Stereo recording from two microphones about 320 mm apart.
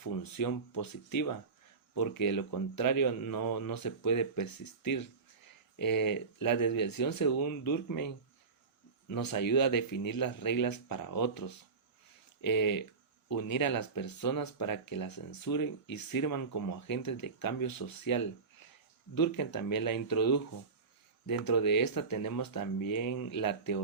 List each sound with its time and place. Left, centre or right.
0.0 s speech: left
2.2 s speech: left
5.8 s speech: left
9.1 s speech: left